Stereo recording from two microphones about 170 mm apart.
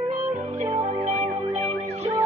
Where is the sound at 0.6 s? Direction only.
45° right (ahead or behind).